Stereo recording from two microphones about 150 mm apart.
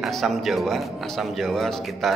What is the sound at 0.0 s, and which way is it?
Speech, centre (ahead or behind).